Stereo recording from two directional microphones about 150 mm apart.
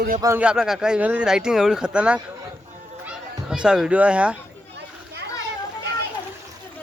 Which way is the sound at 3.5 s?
5° right (ahead or behind).